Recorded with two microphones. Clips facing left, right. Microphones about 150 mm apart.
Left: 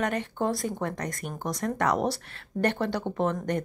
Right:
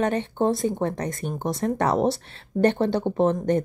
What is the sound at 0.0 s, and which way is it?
Speech, 30° right (ahead or behind).